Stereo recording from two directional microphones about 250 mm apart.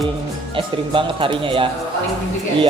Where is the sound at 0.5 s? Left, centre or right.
Right.